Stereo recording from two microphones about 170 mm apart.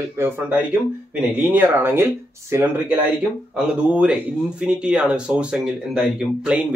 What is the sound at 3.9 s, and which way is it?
Speech, 5° right (ahead or behind).